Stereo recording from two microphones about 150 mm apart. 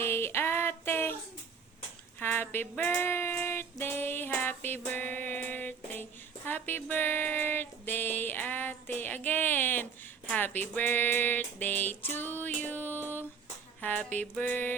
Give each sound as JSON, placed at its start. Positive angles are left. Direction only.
{"t": 0.0, "sound": "female singing", "side_deg": 15}
{"t": 2.1, "sound": "female singing", "side_deg": 15}
{"t": 10.2, "sound": "a sound", "side_deg": 10}